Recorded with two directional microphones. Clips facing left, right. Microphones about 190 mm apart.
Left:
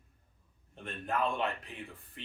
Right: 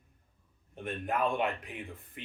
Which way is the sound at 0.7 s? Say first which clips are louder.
Right 2 dB; 15° right (ahead or behind).